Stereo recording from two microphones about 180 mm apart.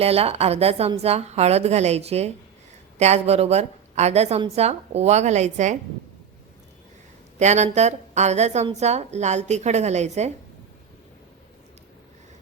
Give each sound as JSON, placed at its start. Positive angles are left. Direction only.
{"t": 0.0, "sound": "a woman's voice", "side_deg": -35}
{"t": 7.3, "sound": "a woman's voice", "side_deg": -40}